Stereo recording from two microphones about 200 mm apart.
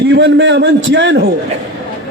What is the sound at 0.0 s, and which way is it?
A man's voice, 60° right (ahead or behind).